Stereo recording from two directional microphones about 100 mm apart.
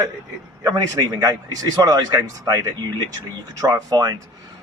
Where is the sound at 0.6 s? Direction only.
45° right (ahead or behind).